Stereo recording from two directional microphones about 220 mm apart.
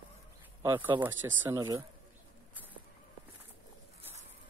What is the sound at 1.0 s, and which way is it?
Speech, 10° right (ahead or behind).